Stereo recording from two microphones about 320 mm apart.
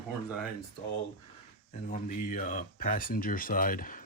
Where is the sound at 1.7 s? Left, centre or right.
Left.